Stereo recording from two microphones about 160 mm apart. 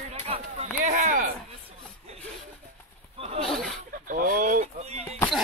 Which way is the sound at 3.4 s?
5° left (ahead or behind).